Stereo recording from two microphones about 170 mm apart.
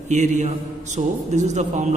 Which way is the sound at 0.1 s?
45° right (ahead or behind).